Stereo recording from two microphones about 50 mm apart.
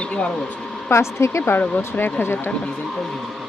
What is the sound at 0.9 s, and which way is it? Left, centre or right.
Speech, left.